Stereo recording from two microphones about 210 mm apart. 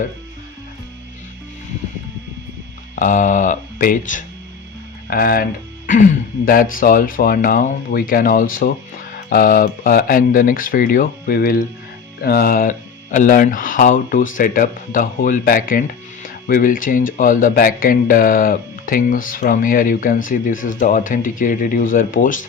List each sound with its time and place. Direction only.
2.9 s speech: 35° left (ahead or behind)